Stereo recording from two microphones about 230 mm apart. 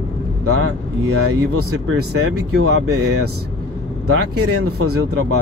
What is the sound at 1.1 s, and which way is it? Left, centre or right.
Speech, right.